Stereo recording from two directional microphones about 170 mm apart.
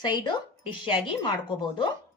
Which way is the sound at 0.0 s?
25° left (ahead or behind).